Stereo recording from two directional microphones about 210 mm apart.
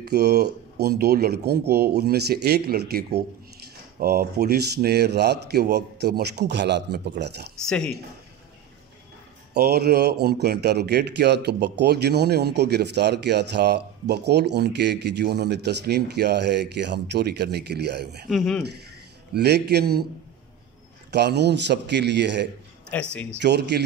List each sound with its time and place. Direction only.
0.0 s speech: 50° right (ahead or behind)
7.6 s speech: 5° left (ahead or behind)
9.5 s speech: 50° right (ahead or behind)
18.3 s speech: centre (ahead or behind)
19.3 s speech: 50° right (ahead or behind)
21.1 s a man's voice: 50° right (ahead or behind)
22.9 s speech: 10° left (ahead or behind)
23.4 s speech: 55° right (ahead or behind)